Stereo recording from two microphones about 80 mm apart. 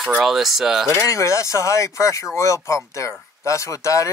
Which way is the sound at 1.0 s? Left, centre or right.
Left.